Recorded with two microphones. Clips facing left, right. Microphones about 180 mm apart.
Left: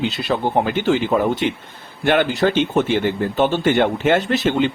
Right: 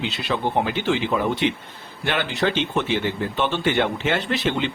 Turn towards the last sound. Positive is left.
turn(degrees=45)  # may be behind; listen again after turning